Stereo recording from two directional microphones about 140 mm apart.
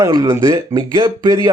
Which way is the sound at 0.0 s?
25° right (ahead or behind).